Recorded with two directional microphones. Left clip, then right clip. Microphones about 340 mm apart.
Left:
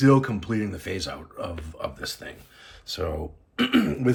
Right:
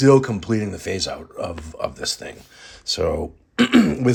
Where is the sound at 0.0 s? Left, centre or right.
Centre.